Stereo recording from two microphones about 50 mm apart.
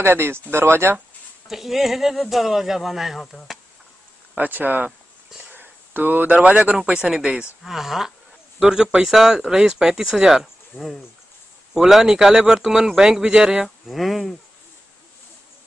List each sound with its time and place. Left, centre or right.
0.0 s speech: right
1.5 s speech: centre
4.4 s speech: right; by 7.4 s centre
7.6 s speech: centre
13.8 s speech: centre